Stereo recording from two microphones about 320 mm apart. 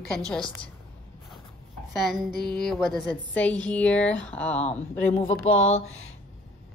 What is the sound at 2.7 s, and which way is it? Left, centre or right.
A woman's voice, centre.